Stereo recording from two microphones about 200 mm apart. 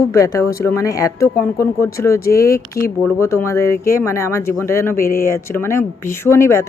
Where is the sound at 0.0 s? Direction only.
15° left (ahead or behind).